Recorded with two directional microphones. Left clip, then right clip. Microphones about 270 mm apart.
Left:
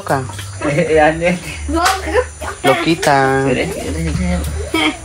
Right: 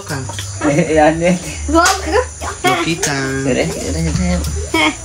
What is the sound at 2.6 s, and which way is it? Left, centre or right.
Speech, centre.